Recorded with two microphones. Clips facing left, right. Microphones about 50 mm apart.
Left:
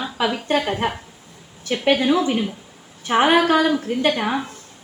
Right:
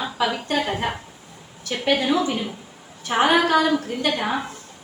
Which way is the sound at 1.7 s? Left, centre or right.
Left.